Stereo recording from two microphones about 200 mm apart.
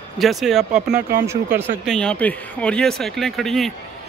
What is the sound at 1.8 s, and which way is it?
Speech, 5° left (ahead or behind).